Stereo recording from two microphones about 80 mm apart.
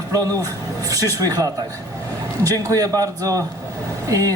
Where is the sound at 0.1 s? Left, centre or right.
Right.